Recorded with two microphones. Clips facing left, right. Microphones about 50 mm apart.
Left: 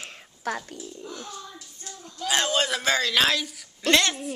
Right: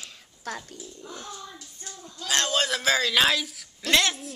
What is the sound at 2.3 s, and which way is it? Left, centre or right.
A woman's voice, centre.